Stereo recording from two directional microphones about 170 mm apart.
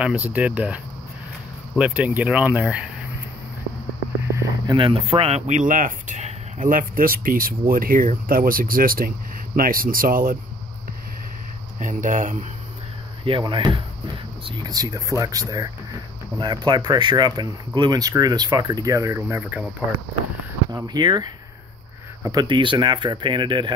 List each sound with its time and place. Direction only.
0.0 s speech: 5° right (ahead or behind)
1.8 s speech: 10° right (ahead or behind)
4.3 s a sound: 15° right (ahead or behind)
4.7 s speech: 35° right (ahead or behind); by 10.3 s 55° right (ahead or behind)
11.8 s speech: 50° right (ahead or behind)
13.2 s speech: 30° right (ahead or behind); by 19.6 s 15° right (ahead or behind)
20.7 s speech: 25° right (ahead or behind)